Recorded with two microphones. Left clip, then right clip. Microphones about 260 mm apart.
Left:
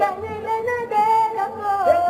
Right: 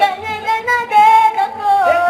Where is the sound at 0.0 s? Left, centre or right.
Centre.